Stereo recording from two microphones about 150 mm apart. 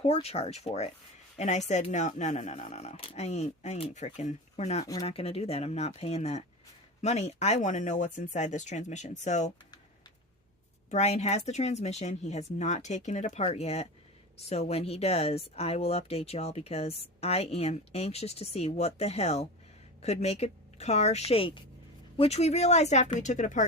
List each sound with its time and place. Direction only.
0.0 s speech: 40° left (ahead or behind)
10.9 s speech: 45° left (ahead or behind)